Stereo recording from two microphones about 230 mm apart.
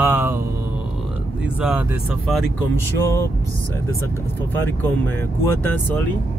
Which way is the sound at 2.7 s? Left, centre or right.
Centre.